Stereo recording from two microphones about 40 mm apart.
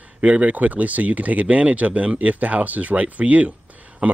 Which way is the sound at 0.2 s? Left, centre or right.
Right.